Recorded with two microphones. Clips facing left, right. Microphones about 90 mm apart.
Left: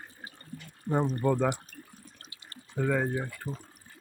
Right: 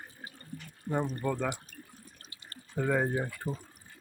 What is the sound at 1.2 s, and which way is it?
Speech, 15° left (ahead or behind).